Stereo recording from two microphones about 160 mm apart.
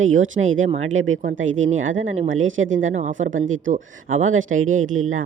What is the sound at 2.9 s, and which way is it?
Speech, 50° right (ahead or behind).